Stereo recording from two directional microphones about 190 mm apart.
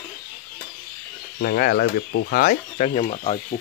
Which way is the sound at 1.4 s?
55° left (ahead or behind).